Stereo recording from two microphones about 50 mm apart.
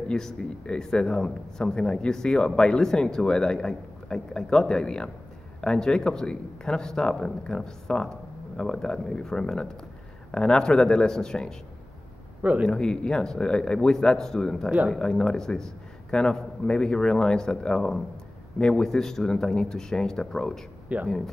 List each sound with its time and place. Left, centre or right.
0.1 s speech: centre
12.4 s a man's voice: right
12.6 s speech: centre
20.9 s speech: right